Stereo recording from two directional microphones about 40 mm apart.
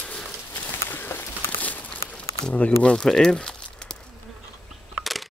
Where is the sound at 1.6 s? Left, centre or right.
Left.